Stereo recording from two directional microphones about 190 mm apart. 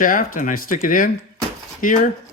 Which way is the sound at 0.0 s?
45° left (ahead or behind).